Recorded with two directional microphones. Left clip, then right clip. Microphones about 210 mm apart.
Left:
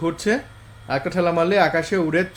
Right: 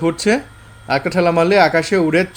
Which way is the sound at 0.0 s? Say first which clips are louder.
Right 5 dB; 30° right (ahead or behind).